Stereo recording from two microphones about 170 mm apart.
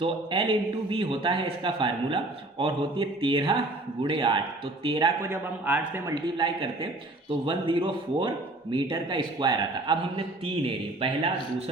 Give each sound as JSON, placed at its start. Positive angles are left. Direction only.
{"t": 0.0, "sound": "a man's voice", "side_deg": -30}
{"t": 5.3, "sound": "a man's voice", "side_deg": -10}
{"t": 6.1, "sound": "a man's voice", "side_deg": -25}